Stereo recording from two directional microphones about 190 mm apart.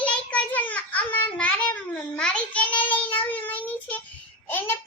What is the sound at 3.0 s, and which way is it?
Child singing, 10° left (ahead or behind).